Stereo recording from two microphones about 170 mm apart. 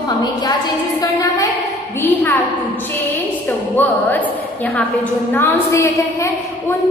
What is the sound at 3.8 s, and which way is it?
Speech, 10° left (ahead or behind).